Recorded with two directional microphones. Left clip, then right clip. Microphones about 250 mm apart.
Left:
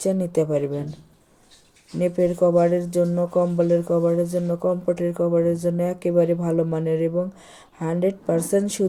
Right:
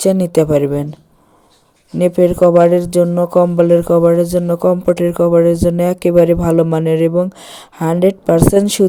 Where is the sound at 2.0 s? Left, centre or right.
Right.